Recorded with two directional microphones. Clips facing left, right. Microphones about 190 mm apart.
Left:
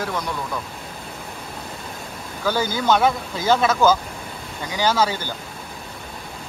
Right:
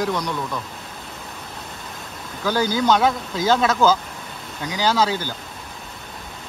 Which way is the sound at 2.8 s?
10° left (ahead or behind).